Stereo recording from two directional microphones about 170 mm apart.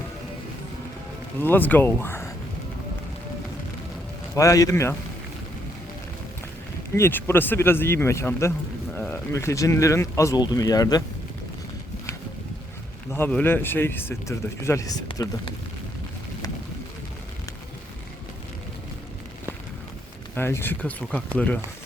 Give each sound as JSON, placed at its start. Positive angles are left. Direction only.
{"t": 1.4, "sound": "speech", "side_deg": 10}
{"t": 4.4, "sound": "a man's voice", "side_deg": 20}
{"t": 6.9, "sound": "speech", "side_deg": 15}
{"t": 13.1, "sound": "speech", "side_deg": 15}
{"t": 15.0, "sound": "a man's voice", "side_deg": 30}
{"t": 20.3, "sound": "speech", "side_deg": 15}